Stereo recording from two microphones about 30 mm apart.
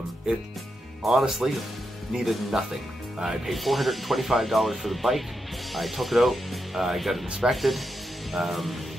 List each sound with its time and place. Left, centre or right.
1.0 s speech: centre
2.5 s speech: centre
3.4 s speech: centre